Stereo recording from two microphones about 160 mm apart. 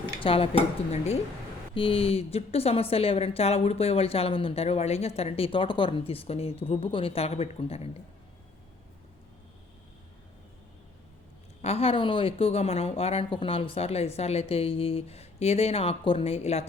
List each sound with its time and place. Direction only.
0.2 s a woman's voice: 35° left (ahead or behind)
11.6 s a woman's voice: 40° left (ahead or behind)